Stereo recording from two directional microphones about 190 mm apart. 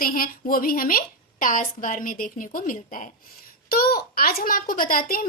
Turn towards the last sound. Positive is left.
turn(degrees=50)  # may be behind; listen again after turning